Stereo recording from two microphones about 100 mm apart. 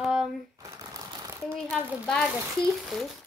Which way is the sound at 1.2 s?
30° right (ahead or behind).